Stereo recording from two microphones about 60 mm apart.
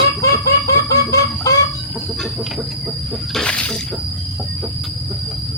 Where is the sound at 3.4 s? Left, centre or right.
Centre.